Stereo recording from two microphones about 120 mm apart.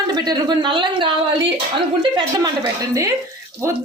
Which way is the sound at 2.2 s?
35° right (ahead or behind).